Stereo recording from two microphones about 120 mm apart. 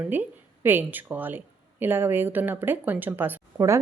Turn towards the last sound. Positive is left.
turn(degrees=-25)  # may be behind; listen again after turning